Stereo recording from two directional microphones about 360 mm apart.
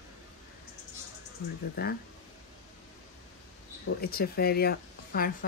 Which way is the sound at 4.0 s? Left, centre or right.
Left.